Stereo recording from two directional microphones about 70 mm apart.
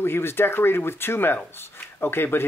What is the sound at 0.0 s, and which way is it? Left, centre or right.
Speech, left.